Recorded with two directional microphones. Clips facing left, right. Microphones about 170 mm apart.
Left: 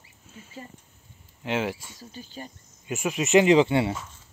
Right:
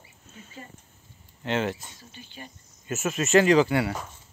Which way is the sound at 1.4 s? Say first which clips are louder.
Even; 10° left (ahead or behind).